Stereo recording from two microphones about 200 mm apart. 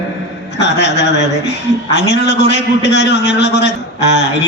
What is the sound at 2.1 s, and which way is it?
A man's voice, 60° left (ahead or behind).